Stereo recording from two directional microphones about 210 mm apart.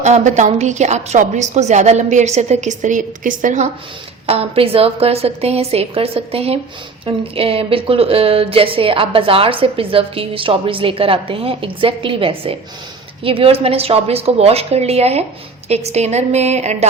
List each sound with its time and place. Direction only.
0.0 s a woman's voice: 35° right (ahead or behind)